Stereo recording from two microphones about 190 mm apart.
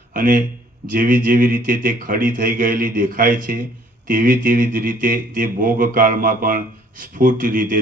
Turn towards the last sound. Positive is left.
turn(degrees=-45)  # may be behind; listen again after turning